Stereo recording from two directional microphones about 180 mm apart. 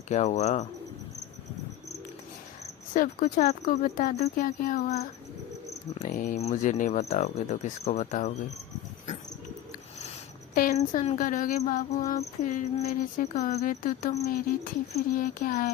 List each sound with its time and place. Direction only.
0.1 s speech: 40° left (ahead or behind)
2.9 s insect: 50° left (ahead or behind)
5.9 s speech: 40° left (ahead or behind)
10.5 s speech: 55° left (ahead or behind)
10.8 s insect: 35° left (ahead or behind)
14.3 s insect: 55° left (ahead or behind)